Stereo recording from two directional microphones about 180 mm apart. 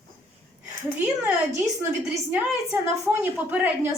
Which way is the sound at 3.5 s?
10° right (ahead or behind).